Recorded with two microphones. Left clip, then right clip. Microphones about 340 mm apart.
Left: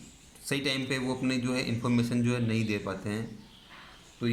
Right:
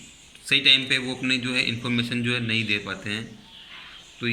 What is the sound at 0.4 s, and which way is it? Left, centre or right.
Speech, centre.